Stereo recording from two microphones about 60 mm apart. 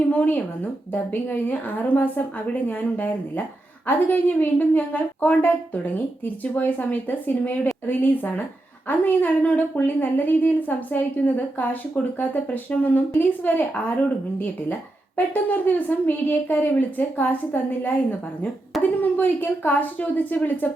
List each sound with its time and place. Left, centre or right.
0.0 s a woman's voice: left